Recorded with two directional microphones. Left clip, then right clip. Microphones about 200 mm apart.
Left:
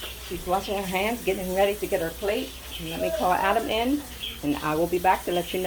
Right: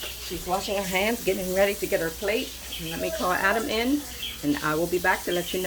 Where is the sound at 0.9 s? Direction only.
35° right (ahead or behind).